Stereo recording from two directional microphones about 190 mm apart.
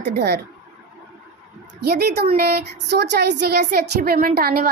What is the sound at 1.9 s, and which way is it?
Speech, 55° right (ahead or behind).